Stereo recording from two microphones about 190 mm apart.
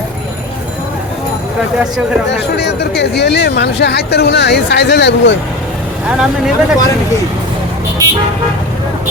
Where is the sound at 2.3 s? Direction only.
65° left (ahead or behind).